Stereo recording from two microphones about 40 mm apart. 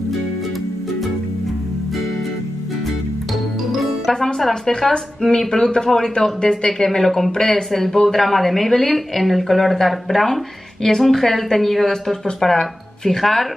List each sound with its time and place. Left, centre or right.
3.7 s music: centre
4.1 s speech: centre
7.3 s speech: centre
7.7 s a woman's voice: centre